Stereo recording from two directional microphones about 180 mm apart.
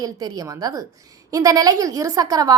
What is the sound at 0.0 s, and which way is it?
A woman's voice, 20° right (ahead or behind).